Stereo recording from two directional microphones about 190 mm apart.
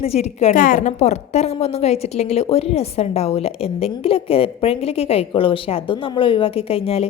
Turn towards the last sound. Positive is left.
turn(degrees=30)  # may be behind; listen again after turning